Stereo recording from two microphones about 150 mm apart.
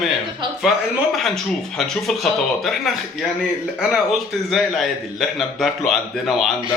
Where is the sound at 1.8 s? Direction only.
Centre (ahead or behind).